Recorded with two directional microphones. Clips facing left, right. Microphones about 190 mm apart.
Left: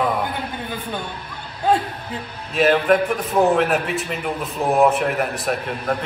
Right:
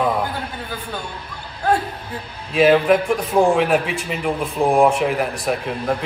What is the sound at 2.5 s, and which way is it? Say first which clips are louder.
A man's voice: right 2 dB; centre (ahead or behind).